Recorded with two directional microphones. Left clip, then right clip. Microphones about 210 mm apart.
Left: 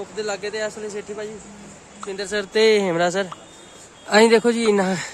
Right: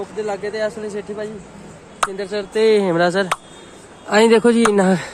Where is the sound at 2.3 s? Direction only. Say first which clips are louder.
Even; 35° left (ahead or behind).